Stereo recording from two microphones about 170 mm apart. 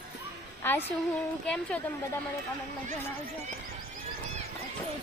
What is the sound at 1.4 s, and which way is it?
Speech, 5° left (ahead or behind).